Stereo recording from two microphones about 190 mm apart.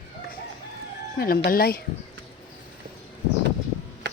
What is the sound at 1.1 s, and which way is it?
Speech, 50° left (ahead or behind).